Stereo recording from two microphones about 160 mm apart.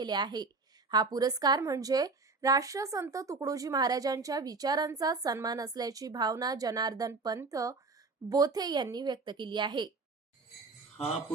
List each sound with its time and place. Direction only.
0.0 s a woman's voice: 25° right (ahead or behind)